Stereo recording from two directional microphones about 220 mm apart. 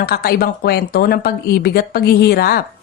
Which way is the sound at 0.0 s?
45° left (ahead or behind).